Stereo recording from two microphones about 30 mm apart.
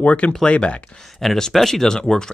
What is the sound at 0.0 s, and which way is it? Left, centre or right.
Speech, left.